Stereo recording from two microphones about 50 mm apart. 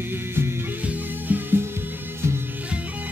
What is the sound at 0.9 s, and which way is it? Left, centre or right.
Music, right.